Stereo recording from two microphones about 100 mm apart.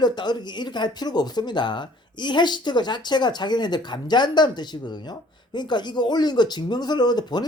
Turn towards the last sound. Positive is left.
turn(degrees=45)  # may be behind; listen again after turning